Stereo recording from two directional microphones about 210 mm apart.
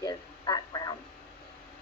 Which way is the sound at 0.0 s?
20° left (ahead or behind).